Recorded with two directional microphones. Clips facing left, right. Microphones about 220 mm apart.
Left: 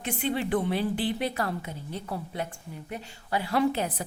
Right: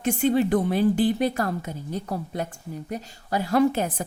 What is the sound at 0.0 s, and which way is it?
A woman's voice, 45° right (ahead or behind).